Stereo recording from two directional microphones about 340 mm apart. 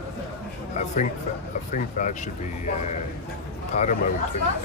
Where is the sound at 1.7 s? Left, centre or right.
Left.